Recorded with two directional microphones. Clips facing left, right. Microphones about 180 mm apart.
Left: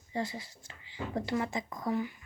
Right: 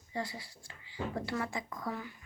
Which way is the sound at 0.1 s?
25° left (ahead or behind).